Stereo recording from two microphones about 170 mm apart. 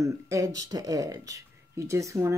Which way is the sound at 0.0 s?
20° right (ahead or behind).